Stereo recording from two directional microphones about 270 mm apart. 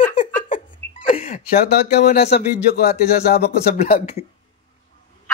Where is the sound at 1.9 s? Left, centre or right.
Left.